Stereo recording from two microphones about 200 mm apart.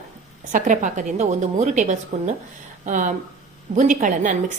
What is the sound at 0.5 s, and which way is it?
A woman's voice, 40° right (ahead or behind).